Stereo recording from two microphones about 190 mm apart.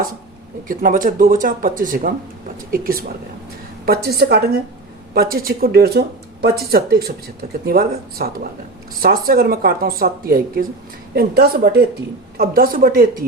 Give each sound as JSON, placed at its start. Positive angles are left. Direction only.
{"t": 0.7, "sound": "a woman's voice", "side_deg": -45}